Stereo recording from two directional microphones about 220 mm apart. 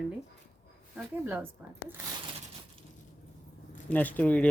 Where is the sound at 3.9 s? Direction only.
5° left (ahead or behind).